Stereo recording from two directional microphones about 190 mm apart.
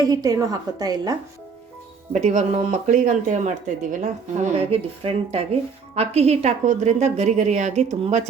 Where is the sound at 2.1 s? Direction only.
40° right (ahead or behind).